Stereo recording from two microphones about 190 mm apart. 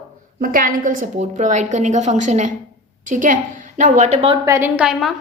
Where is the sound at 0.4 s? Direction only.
45° right (ahead or behind); by 4.4 s 30° right (ahead or behind).